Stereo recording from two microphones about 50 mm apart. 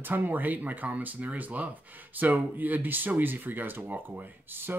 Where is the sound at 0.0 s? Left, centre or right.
Right.